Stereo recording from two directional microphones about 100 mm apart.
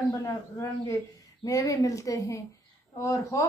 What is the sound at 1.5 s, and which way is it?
Speech, 35° left (ahead or behind).